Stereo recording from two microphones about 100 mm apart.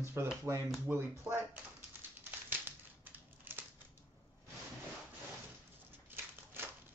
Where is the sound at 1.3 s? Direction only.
15° right (ahead or behind).